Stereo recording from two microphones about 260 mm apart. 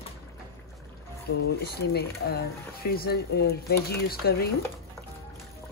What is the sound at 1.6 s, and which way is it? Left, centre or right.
Speech, left.